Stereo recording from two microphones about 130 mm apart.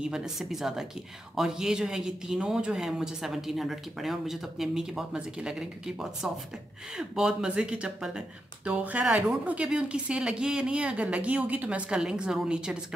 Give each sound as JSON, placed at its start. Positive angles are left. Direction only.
{"t": 0.0, "sound": "a woman's voice", "side_deg": -5}